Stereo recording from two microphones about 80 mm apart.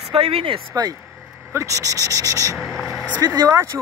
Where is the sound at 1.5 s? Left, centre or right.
Right.